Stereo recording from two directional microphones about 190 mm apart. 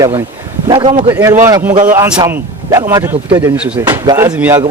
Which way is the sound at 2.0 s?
20° right (ahead or behind).